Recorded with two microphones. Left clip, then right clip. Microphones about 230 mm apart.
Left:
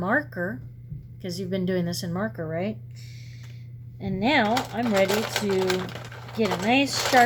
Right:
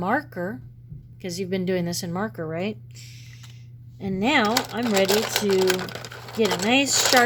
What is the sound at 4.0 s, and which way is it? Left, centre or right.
Speech, right.